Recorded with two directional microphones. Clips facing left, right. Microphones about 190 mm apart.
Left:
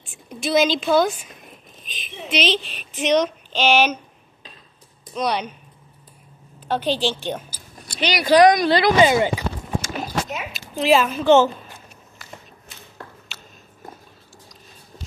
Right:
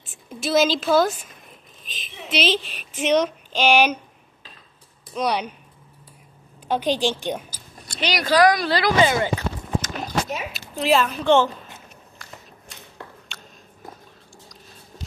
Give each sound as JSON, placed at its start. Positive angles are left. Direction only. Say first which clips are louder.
{"t": 0.3, "sound": "a woman's voice", "louder": "left 1 dB", "side_deg": 0}
{"t": 2.3, "sound": "speech", "louder": "even", "side_deg": -5}
{"t": 5.1, "sound": "speech", "louder": "even", "side_deg": -10}
{"t": 6.7, "sound": "speech", "louder": "even", "side_deg": -10}
{"t": 7.9, "sound": "speech", "louder": "left 2 dB", "side_deg": 0}
{"t": 8.3, "sound": "a woman's voice", "louder": "left 4 dB", "side_deg": 20}
{"t": 12.2, "sound": "a sound", "louder": "left 3 dB", "side_deg": 5}
{"t": 13.3, "sound": "biting", "louder": "right 1 dB", "side_deg": 5}